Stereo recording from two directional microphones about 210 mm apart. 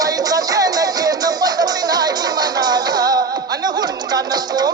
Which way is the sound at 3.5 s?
20° right (ahead or behind).